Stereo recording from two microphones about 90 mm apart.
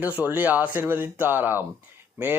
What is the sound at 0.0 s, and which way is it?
Speech, 20° right (ahead or behind).